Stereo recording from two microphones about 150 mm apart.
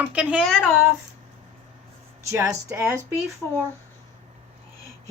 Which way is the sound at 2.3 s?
20° right (ahead or behind).